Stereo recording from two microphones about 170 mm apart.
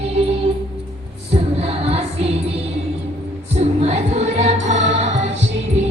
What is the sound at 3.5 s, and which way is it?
Music, 40° right (ahead or behind).